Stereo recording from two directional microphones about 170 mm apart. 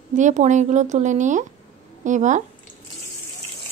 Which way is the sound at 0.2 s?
45° right (ahead or behind).